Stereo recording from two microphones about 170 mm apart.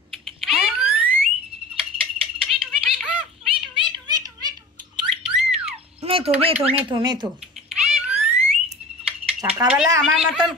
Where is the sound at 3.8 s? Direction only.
25° right (ahead or behind).